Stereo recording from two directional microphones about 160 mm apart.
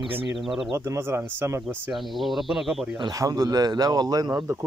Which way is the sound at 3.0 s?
20° right (ahead or behind).